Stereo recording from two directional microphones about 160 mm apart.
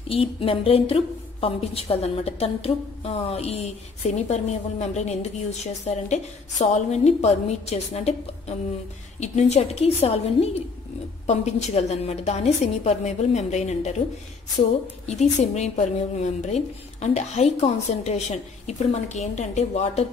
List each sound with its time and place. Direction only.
0.1 s a woman's voice: 35° left (ahead or behind)
15.0 s a woman's voice: 45° left (ahead or behind)